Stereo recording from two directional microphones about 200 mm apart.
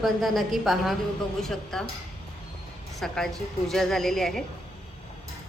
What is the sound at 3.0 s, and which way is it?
A woman's voice, centre (ahead or behind).